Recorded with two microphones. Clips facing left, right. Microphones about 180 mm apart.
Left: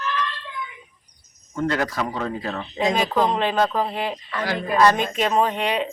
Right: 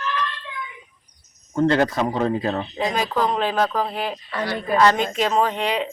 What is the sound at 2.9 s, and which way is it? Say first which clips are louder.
Speech: left 2 dB; 20° left (ahead or behind).